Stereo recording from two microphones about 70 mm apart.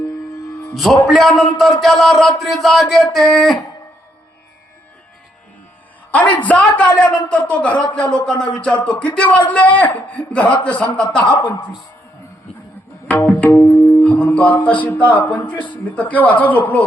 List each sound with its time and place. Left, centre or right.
0.7 s speech: centre
6.1 s a woman's voice: left
7.7 s speech: left
7.9 s a man's voice: centre
11.3 s speech: left
13.5 s music: left
14.0 s music: left
14.6 s a man's voice: left